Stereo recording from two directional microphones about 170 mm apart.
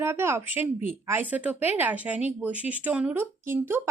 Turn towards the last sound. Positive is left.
turn(degrees=-15)  # may be behind; listen again after turning